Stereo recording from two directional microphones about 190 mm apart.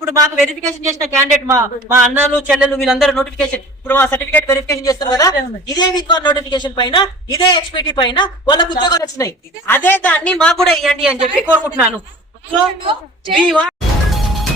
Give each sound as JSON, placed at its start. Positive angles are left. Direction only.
{"t": 0.0, "sound": "a woman's voice", "side_deg": -15}
{"t": 12.8, "sound": "a woman's voice", "side_deg": -25}
{"t": 13.5, "sound": "music", "side_deg": 0}